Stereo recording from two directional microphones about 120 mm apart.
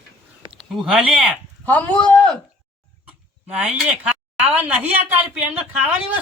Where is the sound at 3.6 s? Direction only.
10° right (ahead or behind).